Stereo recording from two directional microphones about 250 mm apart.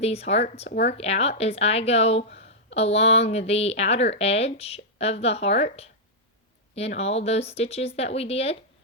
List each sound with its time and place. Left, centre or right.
0.0 s speech: left
2.4 s a sound: left
3.2 s speech: left